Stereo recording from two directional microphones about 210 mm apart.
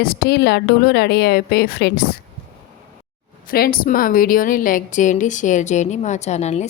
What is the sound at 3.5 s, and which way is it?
A woman's voice, 45° left (ahead or behind).